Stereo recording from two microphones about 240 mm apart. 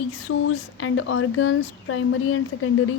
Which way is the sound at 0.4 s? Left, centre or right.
Left.